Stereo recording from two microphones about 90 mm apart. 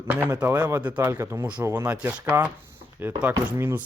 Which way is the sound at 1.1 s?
30° right (ahead or behind).